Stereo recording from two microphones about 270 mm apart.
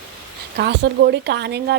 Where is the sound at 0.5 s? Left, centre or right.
Right.